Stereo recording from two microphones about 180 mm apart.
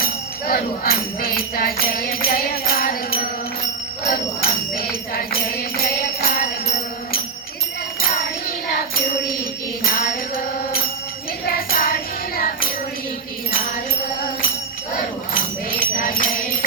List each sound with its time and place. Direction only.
0.0 s music: 55° left (ahead or behind)
11.5 s music: 55° left (ahead or behind)
15.4 s music: 50° left (ahead or behind)